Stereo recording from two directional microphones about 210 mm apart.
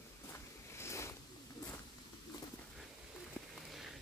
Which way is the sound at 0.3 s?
15° left (ahead or behind).